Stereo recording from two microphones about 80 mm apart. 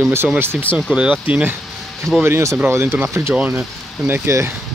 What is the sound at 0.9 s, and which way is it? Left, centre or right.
Speech, centre.